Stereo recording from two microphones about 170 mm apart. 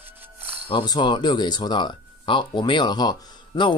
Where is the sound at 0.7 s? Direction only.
30° left (ahead or behind).